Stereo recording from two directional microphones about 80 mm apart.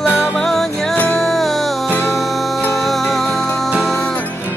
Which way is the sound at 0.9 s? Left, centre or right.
Left.